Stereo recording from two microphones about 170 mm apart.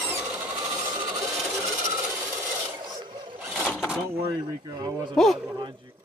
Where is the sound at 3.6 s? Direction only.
Centre (ahead or behind).